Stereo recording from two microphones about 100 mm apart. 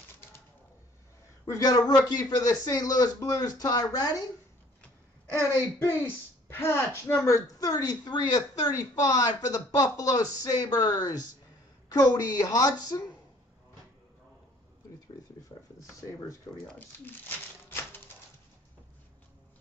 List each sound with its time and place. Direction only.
1.4 s a woman's voice: 40° left (ahead or behind)
5.8 s speech: 20° left (ahead or behind)
7.4 s a woman's voice: 40° left (ahead or behind)
16.6 s speech: 15° left (ahead or behind)
17.6 s typewriter: 20° left (ahead or behind)